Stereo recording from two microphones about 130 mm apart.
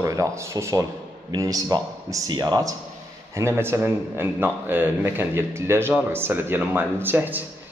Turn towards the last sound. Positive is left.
turn(degrees=-15)  # may be behind; listen again after turning